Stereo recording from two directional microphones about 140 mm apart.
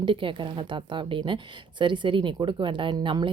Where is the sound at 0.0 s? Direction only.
35° right (ahead or behind).